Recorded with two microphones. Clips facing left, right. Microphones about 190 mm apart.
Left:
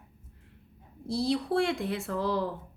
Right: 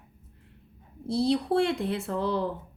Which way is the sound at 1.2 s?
30° right (ahead or behind).